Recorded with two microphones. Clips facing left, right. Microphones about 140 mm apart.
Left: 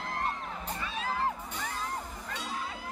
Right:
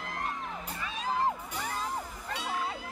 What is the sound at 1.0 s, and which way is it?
Music, 15° right (ahead or behind).